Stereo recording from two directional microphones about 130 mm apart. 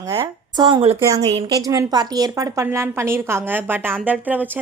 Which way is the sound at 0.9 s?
20° right (ahead or behind).